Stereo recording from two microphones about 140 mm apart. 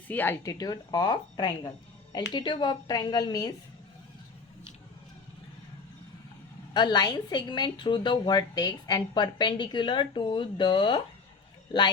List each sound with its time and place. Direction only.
0.1 s speech: 15° left (ahead or behind)
0.4 s a woman's voice: 25° left (ahead or behind)
6.7 s a woman's voice: 30° left (ahead or behind)